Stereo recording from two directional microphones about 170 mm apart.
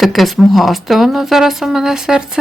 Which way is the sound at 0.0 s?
Centre (ahead or behind).